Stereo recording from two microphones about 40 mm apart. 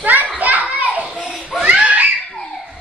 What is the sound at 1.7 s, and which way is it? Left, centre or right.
Giggle, right.